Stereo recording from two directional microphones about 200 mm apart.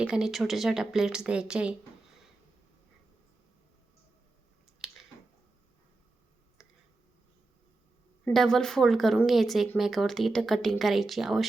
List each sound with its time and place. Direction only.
0.0 s speech: 5° right (ahead or behind)
8.2 s speech: centre (ahead or behind)